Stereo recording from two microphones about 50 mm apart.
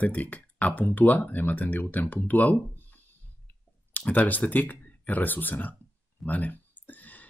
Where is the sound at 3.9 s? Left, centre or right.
Left.